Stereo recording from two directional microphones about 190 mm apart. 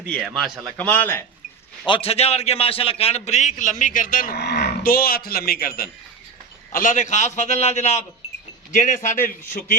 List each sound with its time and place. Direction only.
0.1 s a man's voice: 5° right (ahead or behind)
1.9 s a man's voice: 30° left (ahead or behind); by 9.7 s 50° left (ahead or behind)